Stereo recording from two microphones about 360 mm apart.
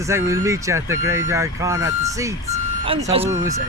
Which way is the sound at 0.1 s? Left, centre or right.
Centre.